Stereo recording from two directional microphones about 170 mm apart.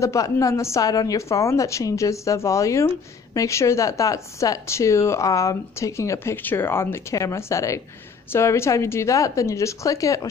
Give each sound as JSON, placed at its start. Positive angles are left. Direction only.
{"t": 0.0, "sound": "speech", "side_deg": 20}